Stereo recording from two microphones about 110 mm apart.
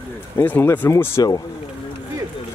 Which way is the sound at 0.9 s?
30° left (ahead or behind).